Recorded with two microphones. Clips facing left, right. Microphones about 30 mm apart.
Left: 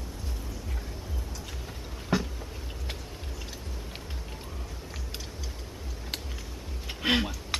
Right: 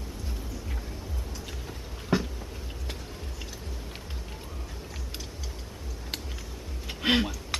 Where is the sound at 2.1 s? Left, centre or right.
Centre.